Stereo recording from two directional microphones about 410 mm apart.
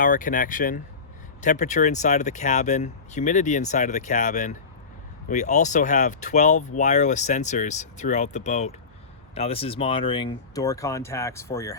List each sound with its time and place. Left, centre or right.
0.0 s speech: centre